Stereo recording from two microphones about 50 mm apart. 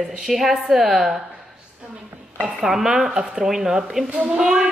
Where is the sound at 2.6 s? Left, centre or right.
Centre.